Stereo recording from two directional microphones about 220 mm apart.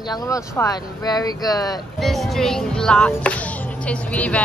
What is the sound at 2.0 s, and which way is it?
Speech, centre (ahead or behind).